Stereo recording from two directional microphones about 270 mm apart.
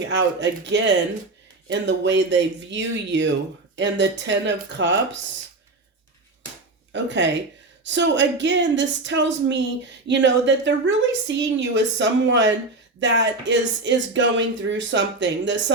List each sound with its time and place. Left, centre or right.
0.1 s speech: right
6.9 s speech: right